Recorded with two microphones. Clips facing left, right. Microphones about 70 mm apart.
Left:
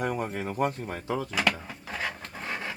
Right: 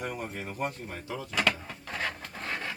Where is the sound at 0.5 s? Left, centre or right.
Left.